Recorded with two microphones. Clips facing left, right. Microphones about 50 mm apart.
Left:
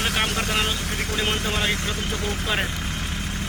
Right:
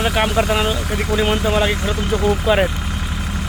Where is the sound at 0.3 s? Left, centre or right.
Right.